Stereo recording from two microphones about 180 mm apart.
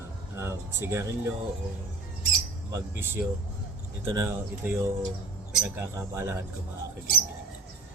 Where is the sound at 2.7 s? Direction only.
15° right (ahead or behind).